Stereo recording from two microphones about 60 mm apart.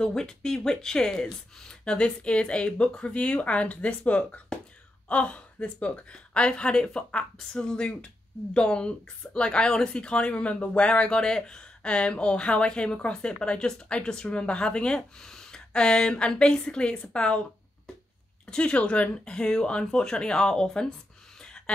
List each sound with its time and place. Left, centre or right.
0.0 s speech: centre
18.5 s speech: centre
21.4 s a sound: centre